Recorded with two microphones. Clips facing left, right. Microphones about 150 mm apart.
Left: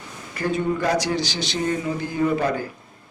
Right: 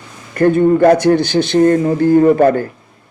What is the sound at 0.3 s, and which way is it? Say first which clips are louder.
A man's voice: right 13 dB; 55° right (ahead or behind).